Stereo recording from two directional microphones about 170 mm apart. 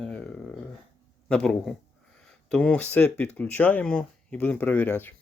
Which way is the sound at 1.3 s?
5° left (ahead or behind).